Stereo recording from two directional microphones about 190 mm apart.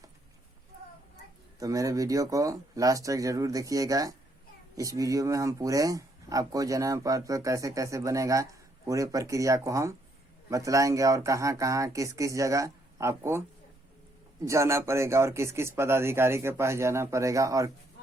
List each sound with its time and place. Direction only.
1.5 s speech: 20° right (ahead or behind)
14.4 s speech: 15° right (ahead or behind)